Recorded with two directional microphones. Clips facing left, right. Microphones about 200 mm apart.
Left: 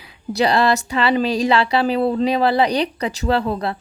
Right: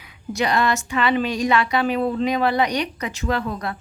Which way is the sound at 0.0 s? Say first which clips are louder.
Left 5 dB; 30° left (ahead or behind).